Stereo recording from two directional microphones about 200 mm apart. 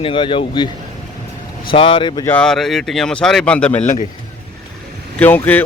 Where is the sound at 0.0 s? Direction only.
25° left (ahead or behind).